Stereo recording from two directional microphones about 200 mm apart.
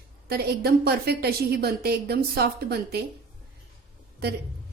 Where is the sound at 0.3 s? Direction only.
50° right (ahead or behind).